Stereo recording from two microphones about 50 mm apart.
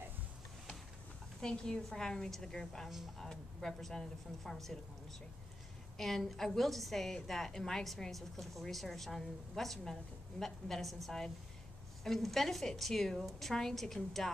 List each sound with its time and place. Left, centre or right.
1.4 s a woman's voice: centre
5.9 s a woman's voice: centre